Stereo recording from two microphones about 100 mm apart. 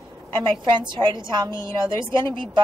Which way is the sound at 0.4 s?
50° right (ahead or behind).